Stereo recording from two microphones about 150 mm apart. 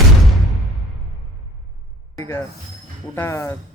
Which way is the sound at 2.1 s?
20° left (ahead or behind).